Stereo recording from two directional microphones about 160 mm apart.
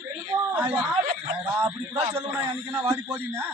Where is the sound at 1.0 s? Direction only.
50° right (ahead or behind).